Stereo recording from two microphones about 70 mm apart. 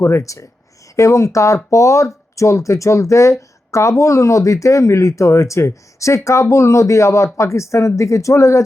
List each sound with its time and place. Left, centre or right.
0.0 s speech: left